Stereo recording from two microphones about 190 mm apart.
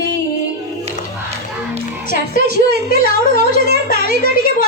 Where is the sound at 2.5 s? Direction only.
60° right (ahead or behind).